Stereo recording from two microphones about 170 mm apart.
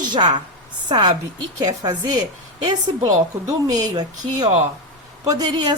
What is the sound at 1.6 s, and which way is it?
Speech, 20° right (ahead or behind).